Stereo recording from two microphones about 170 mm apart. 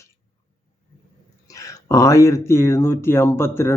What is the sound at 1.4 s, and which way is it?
Speech, 20° left (ahead or behind).